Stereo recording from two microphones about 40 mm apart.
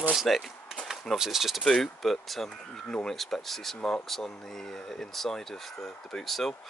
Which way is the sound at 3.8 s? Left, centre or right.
Centre.